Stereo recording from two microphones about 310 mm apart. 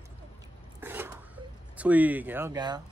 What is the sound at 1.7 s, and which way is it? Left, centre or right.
Speech, centre.